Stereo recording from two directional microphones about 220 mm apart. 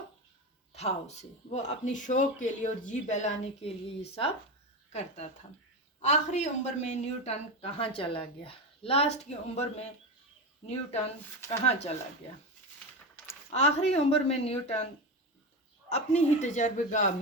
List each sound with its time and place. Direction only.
0.7 s a woman's voice: 30° left (ahead or behind)
10.6 s a woman's voice: 30° left (ahead or behind)
13.5 s a woman's voice: 30° left (ahead or behind)
15.9 s speech: 30° left (ahead or behind)